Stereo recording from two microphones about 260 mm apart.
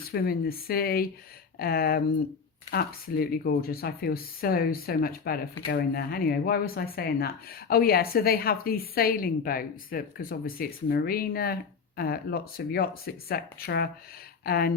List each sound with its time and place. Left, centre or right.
0.1 s speech: left